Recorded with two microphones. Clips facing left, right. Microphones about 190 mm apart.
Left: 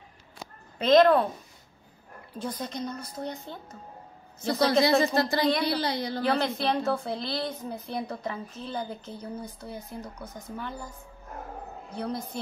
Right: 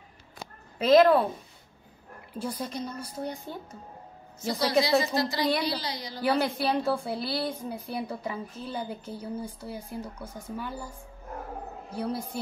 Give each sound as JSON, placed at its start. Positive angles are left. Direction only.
{"t": 0.7, "sound": "a woman's voice", "side_deg": -5}
{"t": 2.3, "sound": "a woman's voice", "side_deg": -10}
{"t": 5.0, "sound": "a woman's voice", "side_deg": 55}
{"t": 6.2, "sound": "a woman's voice", "side_deg": -10}
{"t": 11.9, "sound": "a woman's voice", "side_deg": -5}